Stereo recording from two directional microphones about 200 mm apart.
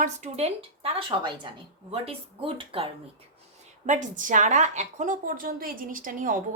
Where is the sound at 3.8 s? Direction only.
40° right (ahead or behind).